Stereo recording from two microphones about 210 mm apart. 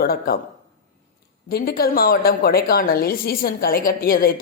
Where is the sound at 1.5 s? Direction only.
45° left (ahead or behind).